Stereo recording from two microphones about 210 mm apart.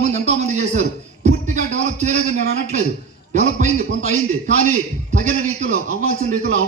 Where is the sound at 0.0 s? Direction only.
35° right (ahead or behind).